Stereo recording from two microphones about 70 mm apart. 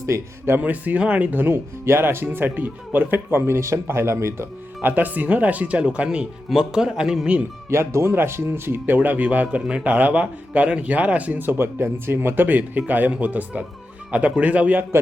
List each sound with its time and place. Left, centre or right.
0.0 s speech: right
0.6 s speech: right
4.8 s speech: right
7.7 s speech: right